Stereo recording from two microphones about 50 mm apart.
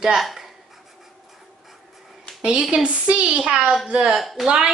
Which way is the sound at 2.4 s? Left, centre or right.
Right.